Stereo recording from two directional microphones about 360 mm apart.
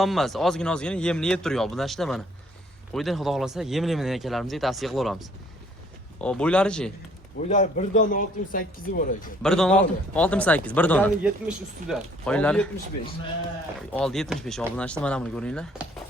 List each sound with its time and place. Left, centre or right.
0.0 s speech: centre
7.4 s speech: centre
9.4 s speech: centre